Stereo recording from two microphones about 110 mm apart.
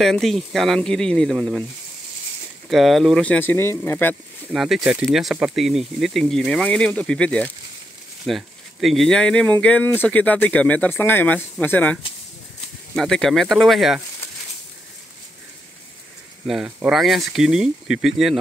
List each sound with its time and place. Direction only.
0.0 s speech: 5° left (ahead or behind)
2.7 s speech: centre (ahead or behind); by 4.2 s 20° left (ahead or behind)
4.5 s speech: centre (ahead or behind)
8.3 s speech: centre (ahead or behind); by 12.0 s 15° left (ahead or behind)
12.9 s speech: 5° left (ahead or behind)
16.4 s speech: 5° right (ahead or behind)